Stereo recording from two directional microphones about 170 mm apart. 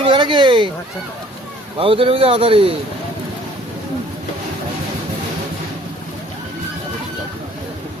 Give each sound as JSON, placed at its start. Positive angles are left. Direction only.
{"t": 0.0, "sound": "speech", "side_deg": -30}
{"t": 1.8, "sound": "a man's voice", "side_deg": -35}